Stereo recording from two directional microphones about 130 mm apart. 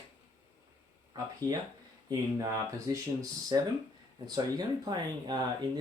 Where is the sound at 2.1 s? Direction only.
25° right (ahead or behind).